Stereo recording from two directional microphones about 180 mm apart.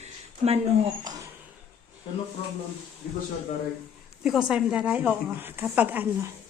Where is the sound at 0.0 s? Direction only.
35° right (ahead or behind).